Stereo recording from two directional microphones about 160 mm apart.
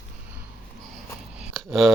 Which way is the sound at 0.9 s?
Centre (ahead or behind).